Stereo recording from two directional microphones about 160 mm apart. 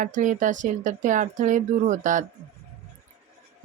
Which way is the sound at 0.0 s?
55° right (ahead or behind).